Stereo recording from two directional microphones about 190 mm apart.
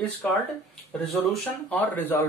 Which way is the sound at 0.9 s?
5° left (ahead or behind).